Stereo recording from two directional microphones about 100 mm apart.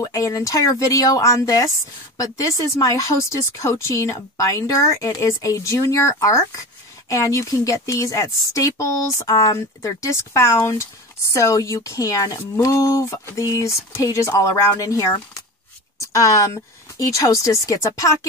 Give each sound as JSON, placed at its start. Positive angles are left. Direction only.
{"t": 0.0, "sound": "speech", "side_deg": 35}